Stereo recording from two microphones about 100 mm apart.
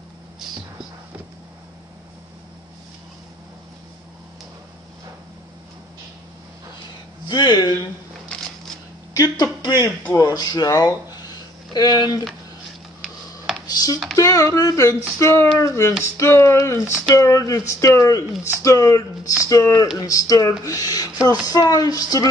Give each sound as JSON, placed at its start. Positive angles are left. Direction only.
{"t": 7.2, "sound": "speech", "side_deg": 45}
{"t": 9.1, "sound": "a woman's voice", "side_deg": 40}
{"t": 13.7, "sound": "computer keyboard", "side_deg": 40}
{"t": 14.1, "sound": "speech", "side_deg": 35}